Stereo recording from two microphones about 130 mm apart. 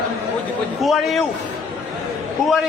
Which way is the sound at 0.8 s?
Centre (ahead or behind).